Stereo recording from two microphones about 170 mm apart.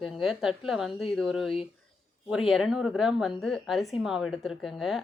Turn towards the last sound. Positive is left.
turn(degrees=0)  # may be behind; listen again after turning